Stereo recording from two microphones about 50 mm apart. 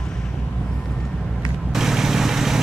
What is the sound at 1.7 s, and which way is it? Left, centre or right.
Vehicle, centre.